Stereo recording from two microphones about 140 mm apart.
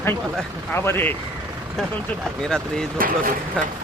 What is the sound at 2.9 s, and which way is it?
Speech, 85° right.